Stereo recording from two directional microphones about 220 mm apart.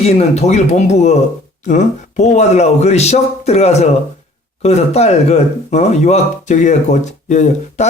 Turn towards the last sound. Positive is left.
turn(degrees=35)  # may be behind; listen again after turning